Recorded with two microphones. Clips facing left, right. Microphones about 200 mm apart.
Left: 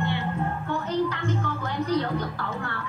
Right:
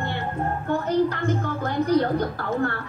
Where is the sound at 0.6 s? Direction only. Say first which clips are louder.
Right 6 dB; 45° right (ahead or behind).